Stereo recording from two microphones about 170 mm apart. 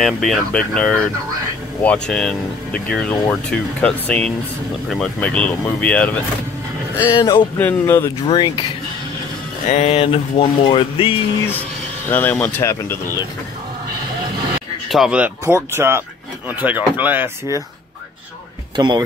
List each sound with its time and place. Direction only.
0.0 s speech: centre (ahead or behind)
7.1 s speech: 25° left (ahead or behind)
7.5 s speech: 10° left (ahead or behind)
8.2 s speech: 30° left (ahead or behind)
9.7 s speech: 40° left (ahead or behind)
12.1 s speech: 10° left (ahead or behind)
14.9 s speech: 5° right (ahead or behind)
18.8 s speech: 25° right (ahead or behind)